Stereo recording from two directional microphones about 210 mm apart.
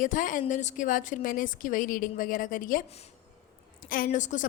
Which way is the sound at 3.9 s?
40° left (ahead or behind).